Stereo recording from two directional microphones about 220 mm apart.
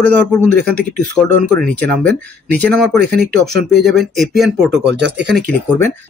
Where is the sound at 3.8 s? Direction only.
Centre (ahead or behind).